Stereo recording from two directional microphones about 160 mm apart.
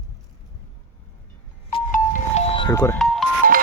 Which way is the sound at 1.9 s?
55° left (ahead or behind).